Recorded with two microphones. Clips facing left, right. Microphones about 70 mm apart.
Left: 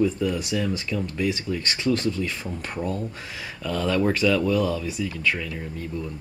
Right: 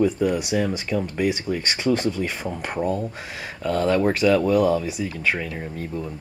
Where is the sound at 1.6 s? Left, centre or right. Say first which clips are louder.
Right 2 dB; centre.